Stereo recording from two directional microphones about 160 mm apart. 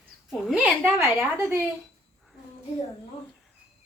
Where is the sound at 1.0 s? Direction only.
15° right (ahead or behind).